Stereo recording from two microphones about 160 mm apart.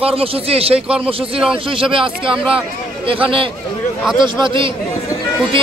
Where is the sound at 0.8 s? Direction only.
5° right (ahead or behind).